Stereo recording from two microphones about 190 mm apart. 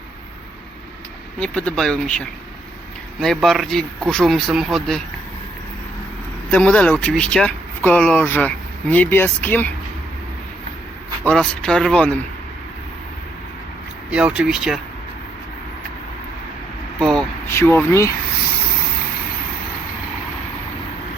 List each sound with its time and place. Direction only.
1.4 s speech: 5° left (ahead or behind)
6.5 s speech: 5° left (ahead or behind)
11.2 s speech: 5° left (ahead or behind)
14.1 s speech: 5° right (ahead or behind)
17.0 s vehicle: centre (ahead or behind)
17.5 s speech: 15° left (ahead or behind)